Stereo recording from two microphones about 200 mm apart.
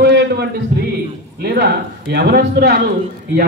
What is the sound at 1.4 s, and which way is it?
Speech, 55° right (ahead or behind).